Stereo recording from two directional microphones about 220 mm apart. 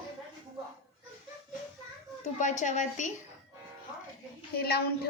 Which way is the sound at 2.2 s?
35° left (ahead or behind).